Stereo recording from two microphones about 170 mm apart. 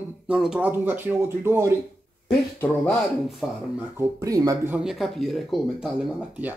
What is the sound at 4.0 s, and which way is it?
Speech, 20° right (ahead or behind).